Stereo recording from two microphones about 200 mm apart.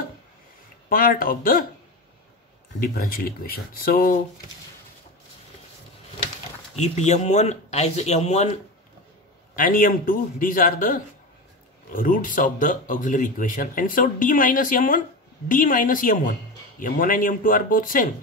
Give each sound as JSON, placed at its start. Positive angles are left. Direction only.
{"t": 0.8, "sound": "speech", "side_deg": 45}
{"t": 2.8, "sound": "speech", "side_deg": 50}
{"t": 6.8, "sound": "speech", "side_deg": 35}
{"t": 9.6, "sound": "speech", "side_deg": 45}